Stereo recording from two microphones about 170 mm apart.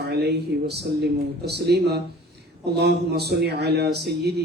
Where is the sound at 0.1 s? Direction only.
75° right (ahead or behind).